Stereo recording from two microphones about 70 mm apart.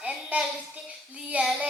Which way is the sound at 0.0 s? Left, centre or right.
Centre.